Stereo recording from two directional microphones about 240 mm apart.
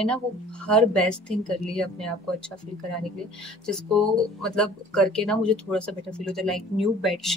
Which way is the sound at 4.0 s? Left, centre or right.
Centre.